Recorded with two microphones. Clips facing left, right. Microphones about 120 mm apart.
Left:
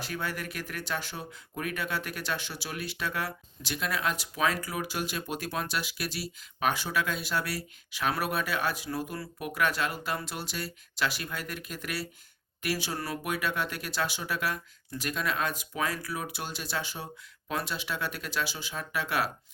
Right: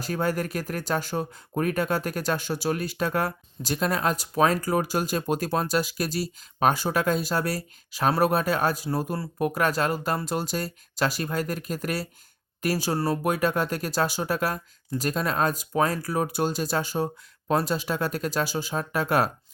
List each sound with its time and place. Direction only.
0.0 s speech: 40° right (ahead or behind)